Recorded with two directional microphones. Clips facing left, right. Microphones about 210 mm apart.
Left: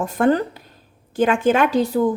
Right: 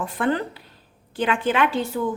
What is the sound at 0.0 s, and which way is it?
Speech, 45° left (ahead or behind).